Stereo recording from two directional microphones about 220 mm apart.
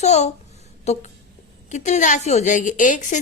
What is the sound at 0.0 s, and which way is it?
A woman's voice, 30° left (ahead or behind).